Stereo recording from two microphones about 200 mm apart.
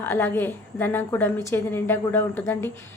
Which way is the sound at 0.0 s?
10° left (ahead or behind).